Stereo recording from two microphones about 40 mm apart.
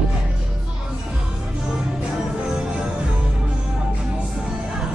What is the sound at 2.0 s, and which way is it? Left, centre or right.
Music, right.